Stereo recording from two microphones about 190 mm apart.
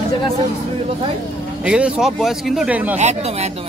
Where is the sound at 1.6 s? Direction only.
5° right (ahead or behind).